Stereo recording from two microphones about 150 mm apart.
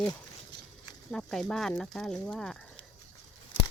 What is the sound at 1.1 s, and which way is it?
Speech, centre (ahead or behind).